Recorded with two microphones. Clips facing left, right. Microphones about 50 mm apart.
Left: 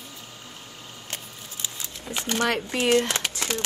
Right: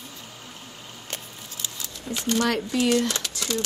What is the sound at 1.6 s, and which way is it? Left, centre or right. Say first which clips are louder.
Speech: even; left.